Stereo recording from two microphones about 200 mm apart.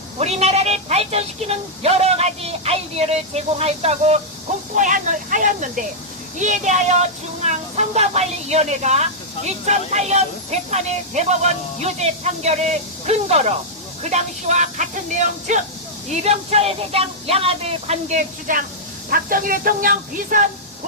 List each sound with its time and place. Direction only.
0.2 s a woman's voice: 30° right (ahead or behind)